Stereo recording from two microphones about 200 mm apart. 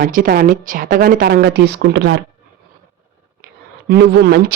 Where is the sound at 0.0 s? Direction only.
45° right (ahead or behind); by 2.2 s 60° right (ahead or behind).